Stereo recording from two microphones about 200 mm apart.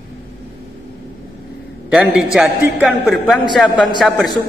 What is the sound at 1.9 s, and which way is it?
A man's voice, 5° right (ahead or behind).